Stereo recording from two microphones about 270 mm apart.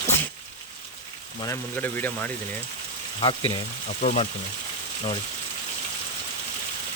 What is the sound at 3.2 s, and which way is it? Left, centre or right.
Speech, centre.